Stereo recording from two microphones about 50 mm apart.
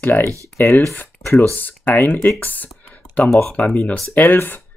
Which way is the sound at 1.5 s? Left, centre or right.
Left.